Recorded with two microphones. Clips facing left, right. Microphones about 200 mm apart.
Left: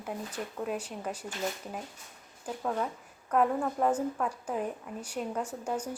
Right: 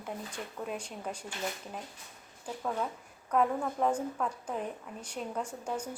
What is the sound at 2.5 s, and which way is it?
A woman's voice, 5° left (ahead or behind).